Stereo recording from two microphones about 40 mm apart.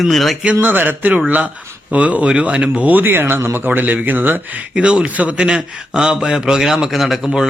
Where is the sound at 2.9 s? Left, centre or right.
Right.